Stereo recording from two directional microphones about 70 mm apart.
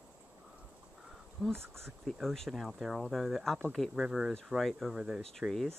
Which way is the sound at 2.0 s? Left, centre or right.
Centre.